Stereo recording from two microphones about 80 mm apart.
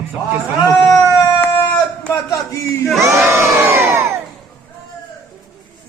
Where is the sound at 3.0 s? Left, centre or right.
Right.